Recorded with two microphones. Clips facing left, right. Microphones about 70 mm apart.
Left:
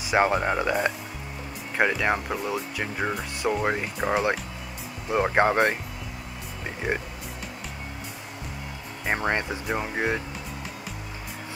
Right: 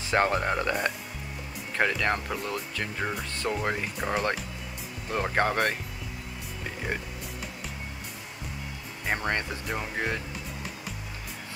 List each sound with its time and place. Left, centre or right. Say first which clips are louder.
0.0 s speech: left 3 dB; centre
6.9 s speech: left 5 dB; left
9.0 s speech: left 3 dB; centre